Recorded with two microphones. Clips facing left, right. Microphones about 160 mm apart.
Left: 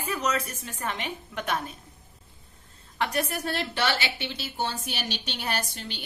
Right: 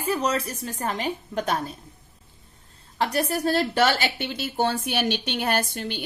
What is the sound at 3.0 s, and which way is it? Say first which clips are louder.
A woman's voice: right 4 dB; 35° right (ahead or behind).